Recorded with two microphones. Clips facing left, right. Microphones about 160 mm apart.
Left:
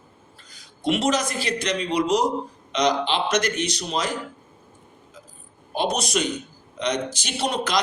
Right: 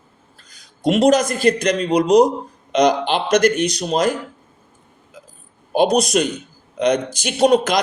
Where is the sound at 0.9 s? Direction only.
45° right (ahead or behind).